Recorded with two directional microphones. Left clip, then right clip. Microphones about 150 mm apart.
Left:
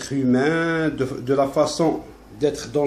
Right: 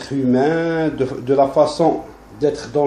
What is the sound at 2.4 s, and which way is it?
Speech, 20° left (ahead or behind).